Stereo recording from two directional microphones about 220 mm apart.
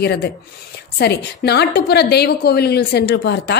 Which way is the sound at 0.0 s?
45° left (ahead or behind).